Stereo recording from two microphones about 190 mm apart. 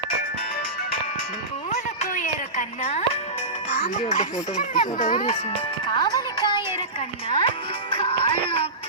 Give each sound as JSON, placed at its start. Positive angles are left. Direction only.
{"t": 1.7, "sound": "music", "side_deg": 40}
{"t": 3.7, "sound": "speech", "side_deg": 35}
{"t": 5.9, "sound": "music", "side_deg": 20}
{"t": 7.3, "sound": "speech", "side_deg": 25}